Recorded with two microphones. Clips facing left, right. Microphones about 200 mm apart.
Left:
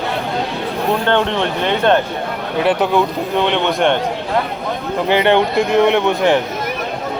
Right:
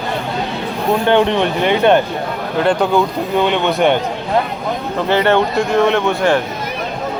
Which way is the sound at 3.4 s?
5° right (ahead or behind).